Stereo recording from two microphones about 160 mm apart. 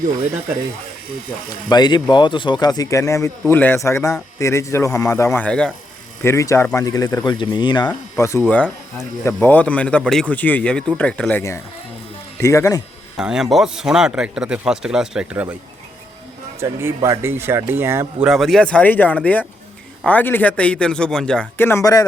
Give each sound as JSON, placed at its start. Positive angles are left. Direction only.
{"t": 1.7, "sound": "a man's voice", "side_deg": 25}
{"t": 6.2, "sound": "speech", "side_deg": 20}
{"t": 8.2, "sound": "a man's voice", "side_deg": 15}
{"t": 13.1, "sound": "speech", "side_deg": -5}
{"t": 16.6, "sound": "speech", "side_deg": -15}
{"t": 18.3, "sound": "a man's voice", "side_deg": 0}